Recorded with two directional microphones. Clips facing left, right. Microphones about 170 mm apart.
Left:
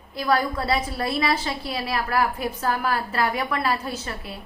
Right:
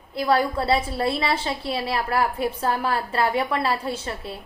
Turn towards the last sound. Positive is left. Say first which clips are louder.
# right 2 dB
turn(degrees=-30)  # may be behind; listen again after turning